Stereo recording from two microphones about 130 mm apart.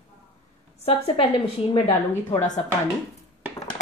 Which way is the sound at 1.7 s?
40° left (ahead or behind).